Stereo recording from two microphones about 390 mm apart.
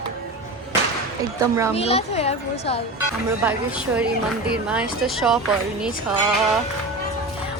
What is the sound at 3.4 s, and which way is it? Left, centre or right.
A woman's voice, centre.